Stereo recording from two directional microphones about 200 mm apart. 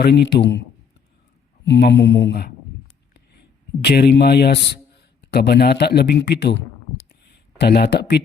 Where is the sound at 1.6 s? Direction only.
60° left (ahead or behind).